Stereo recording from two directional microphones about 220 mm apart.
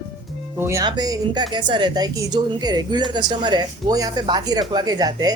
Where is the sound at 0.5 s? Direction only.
10° right (ahead or behind).